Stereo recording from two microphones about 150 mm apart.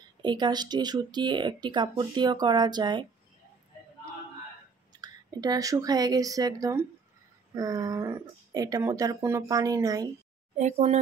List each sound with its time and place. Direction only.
0.2 s speech: 30° right (ahead or behind)
4.9 s speech: 25° right (ahead or behind)
10.5 s speech: 50° right (ahead or behind)